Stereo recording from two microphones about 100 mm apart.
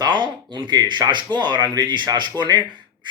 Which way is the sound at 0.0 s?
45° right (ahead or behind).